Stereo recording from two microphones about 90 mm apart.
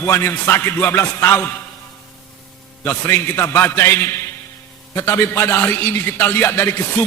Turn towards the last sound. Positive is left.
turn(degrees=25)  # may be behind; listen again after turning